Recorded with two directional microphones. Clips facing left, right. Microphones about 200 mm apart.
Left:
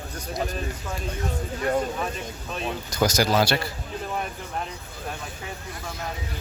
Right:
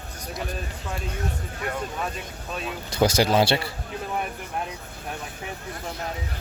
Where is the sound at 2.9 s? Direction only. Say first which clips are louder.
Right 2 dB; 30° right (ahead or behind).